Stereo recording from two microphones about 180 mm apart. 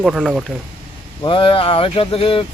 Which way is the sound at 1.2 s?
30° left (ahead or behind).